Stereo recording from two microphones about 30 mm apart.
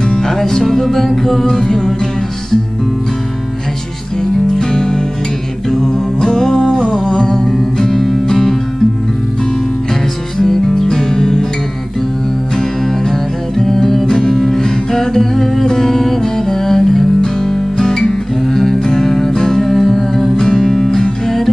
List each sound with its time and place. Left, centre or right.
0.2 s music: centre
0.5 s music: left
0.7 s music: centre
1.5 s music: left
4.2 s music: left
6.2 s music: left
6.9 s music: centre
10.8 s music: centre
13.1 s music: centre
19.6 s music: centre